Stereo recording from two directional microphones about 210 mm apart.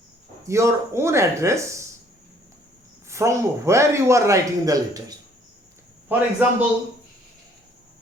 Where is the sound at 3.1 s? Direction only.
15° right (ahead or behind).